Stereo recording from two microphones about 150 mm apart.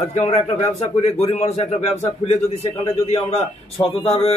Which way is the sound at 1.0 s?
45° left (ahead or behind).